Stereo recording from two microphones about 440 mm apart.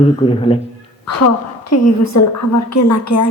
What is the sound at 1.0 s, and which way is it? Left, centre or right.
A woman's voice, left.